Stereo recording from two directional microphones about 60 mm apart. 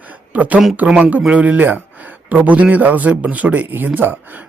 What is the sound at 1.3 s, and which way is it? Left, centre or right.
A man's voice, right.